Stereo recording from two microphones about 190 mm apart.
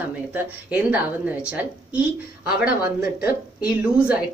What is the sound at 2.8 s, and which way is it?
Speech, 55° left (ahead or behind).